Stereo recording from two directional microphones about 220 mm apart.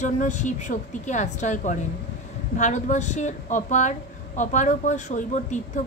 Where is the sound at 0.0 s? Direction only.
35° left (ahead or behind).